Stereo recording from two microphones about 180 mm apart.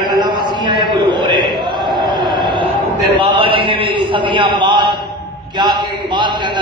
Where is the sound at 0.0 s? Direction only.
25° right (ahead or behind).